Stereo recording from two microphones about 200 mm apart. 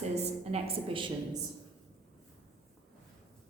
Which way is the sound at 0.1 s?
30° right (ahead or behind).